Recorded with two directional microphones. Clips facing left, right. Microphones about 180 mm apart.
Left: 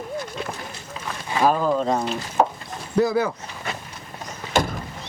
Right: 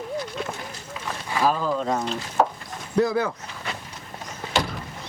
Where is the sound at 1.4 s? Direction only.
50° left (ahead or behind); by 2.0 s 30° left (ahead or behind).